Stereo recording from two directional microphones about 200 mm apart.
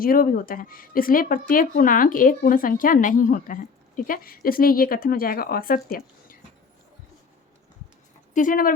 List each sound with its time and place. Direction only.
0.0 s speech: 45° left (ahead or behind)
8.3 s speech: 40° left (ahead or behind)